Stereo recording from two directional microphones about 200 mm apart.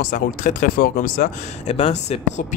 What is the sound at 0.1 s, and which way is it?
Speech, 40° left (ahead or behind).